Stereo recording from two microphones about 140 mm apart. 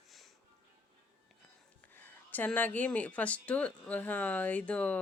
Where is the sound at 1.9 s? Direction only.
15° left (ahead or behind).